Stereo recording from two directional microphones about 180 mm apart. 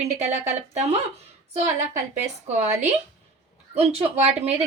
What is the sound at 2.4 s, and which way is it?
Speech, 40° right (ahead or behind).